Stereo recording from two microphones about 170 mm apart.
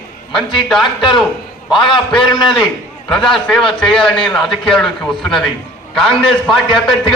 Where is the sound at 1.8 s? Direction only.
30° left (ahead or behind).